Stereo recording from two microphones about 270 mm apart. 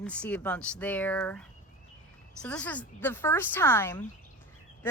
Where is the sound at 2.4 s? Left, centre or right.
Centre.